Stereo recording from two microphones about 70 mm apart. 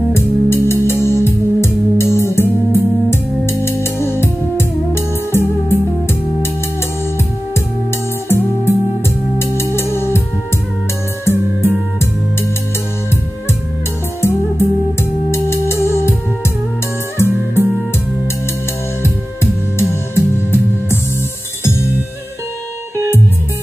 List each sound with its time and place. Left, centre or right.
0.1 s music: left
8.3 s music: left
11.2 s music: left
14.2 s music: left
19.0 s music: left